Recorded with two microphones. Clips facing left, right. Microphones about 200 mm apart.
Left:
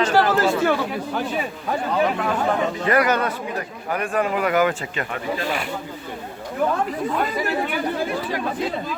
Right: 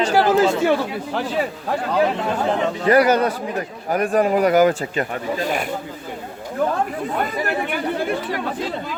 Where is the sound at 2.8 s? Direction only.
35° right (ahead or behind).